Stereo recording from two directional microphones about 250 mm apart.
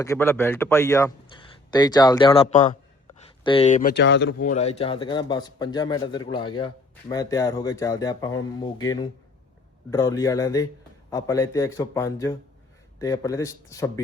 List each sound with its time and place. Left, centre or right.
0.0 s speech: centre; by 3.9 s left
3.9 s speech: left
4.4 s speech: left; by 14.0 s centre